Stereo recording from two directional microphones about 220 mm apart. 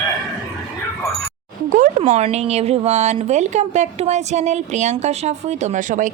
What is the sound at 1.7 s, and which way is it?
Speech, 35° right (ahead or behind).